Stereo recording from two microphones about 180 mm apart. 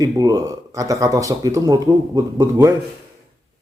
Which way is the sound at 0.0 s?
20° right (ahead or behind).